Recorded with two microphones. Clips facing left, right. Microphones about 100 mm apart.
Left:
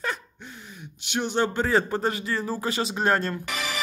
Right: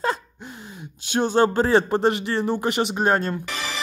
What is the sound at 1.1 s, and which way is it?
Speech, 35° right (ahead or behind).